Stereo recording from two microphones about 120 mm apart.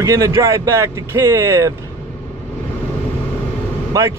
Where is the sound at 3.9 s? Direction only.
25° right (ahead or behind).